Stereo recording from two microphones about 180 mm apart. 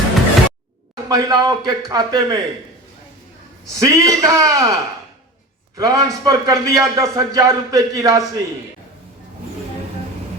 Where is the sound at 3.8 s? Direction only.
20° right (ahead or behind).